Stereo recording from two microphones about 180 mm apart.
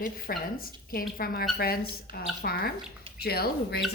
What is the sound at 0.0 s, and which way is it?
Speech, 55° left (ahead or behind).